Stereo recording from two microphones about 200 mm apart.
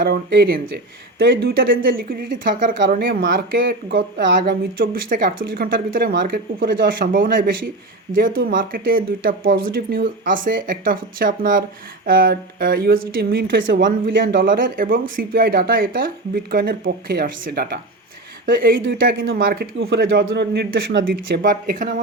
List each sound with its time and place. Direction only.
0.0 s speech: 50° right (ahead or behind)
13.6 s speech: 65° right (ahead or behind); by 19.6 s 50° right (ahead or behind)
19.9 s a man's voice: 60° right (ahead or behind)
21.0 s speech: 45° right (ahead or behind)